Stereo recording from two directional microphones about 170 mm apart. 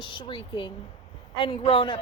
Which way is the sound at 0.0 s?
25° left (ahead or behind).